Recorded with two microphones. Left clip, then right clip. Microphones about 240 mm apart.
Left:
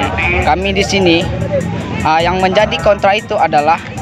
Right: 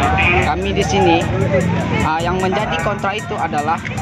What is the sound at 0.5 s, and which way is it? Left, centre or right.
Speech, left.